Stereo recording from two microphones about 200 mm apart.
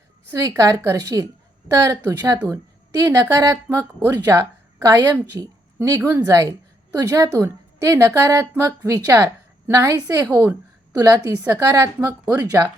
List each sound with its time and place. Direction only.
0.3 s a woman's voice: 15° right (ahead or behind)
11.9 s a woman's voice: 5° right (ahead or behind)